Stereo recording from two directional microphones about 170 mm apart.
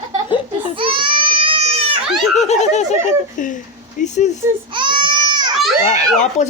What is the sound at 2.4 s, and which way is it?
Speech, 40° left (ahead or behind).